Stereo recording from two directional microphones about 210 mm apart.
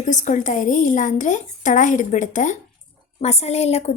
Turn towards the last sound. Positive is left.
turn(degrees=30)  # may be behind; listen again after turning